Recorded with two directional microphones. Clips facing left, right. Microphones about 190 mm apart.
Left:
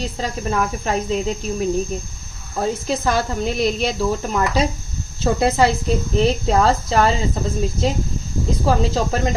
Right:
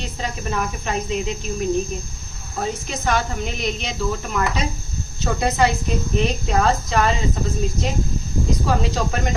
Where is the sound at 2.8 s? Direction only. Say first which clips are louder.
Left 3 dB; 35° left (ahead or behind).